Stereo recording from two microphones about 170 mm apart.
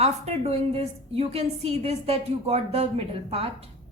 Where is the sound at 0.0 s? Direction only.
40° right (ahead or behind).